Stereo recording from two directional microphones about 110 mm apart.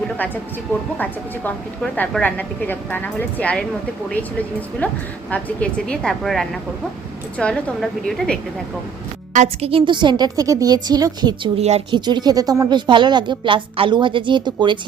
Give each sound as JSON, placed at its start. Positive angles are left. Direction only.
{"t": 2.2, "sound": "a woman's voice", "side_deg": 15}
{"t": 9.3, "sound": "a woman's voice", "side_deg": -80}
{"t": 11.5, "sound": "speech", "side_deg": -80}
{"t": 11.9, "sound": "speech", "side_deg": -45}